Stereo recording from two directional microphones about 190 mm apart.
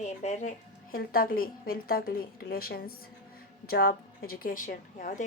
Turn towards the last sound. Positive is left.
turn(degrees=40)  # may be behind; listen again after turning